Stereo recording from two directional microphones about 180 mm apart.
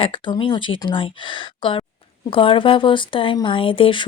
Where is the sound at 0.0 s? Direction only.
25° left (ahead or behind).